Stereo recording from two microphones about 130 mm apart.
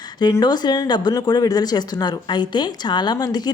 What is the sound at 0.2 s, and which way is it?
Speech, 30° left (ahead or behind).